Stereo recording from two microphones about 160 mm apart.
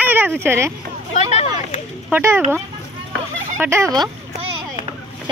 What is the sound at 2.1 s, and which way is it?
Speech, 15° right (ahead or behind).